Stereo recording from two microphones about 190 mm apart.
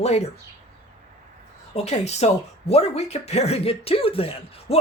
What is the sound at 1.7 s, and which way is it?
Speech, 35° left (ahead or behind).